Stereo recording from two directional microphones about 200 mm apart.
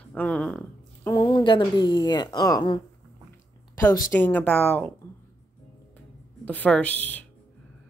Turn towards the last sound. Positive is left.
turn(degrees=10)  # may be behind; listen again after turning